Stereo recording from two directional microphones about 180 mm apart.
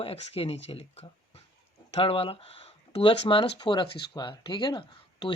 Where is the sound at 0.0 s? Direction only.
35° left (ahead or behind).